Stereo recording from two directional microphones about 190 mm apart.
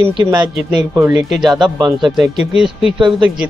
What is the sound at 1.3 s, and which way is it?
Speech, centre (ahead or behind).